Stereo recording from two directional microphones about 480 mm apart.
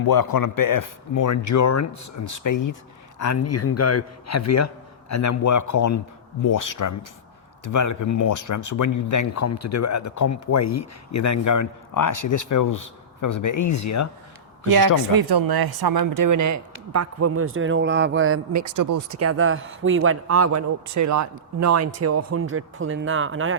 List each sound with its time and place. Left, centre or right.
0.0 s speech: left
15.1 s speech: right
18.5 s speech: right